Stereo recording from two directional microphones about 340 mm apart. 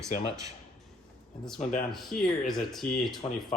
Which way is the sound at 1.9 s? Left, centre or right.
Centre.